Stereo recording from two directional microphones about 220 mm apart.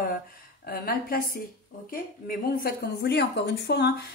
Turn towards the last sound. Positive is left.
turn(degrees=50)  # may be behind; listen again after turning